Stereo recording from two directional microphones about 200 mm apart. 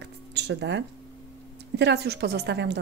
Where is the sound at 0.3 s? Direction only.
60° right (ahead or behind).